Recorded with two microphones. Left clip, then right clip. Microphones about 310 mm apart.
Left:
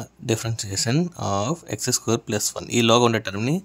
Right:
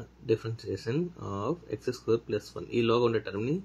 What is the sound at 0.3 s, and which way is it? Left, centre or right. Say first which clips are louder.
Speech: left 3 dB; left.